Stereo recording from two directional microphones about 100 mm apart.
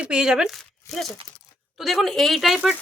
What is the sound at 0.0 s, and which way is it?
Speech, 10° right (ahead or behind).